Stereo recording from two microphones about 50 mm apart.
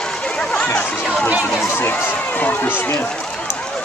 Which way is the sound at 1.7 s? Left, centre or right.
Left.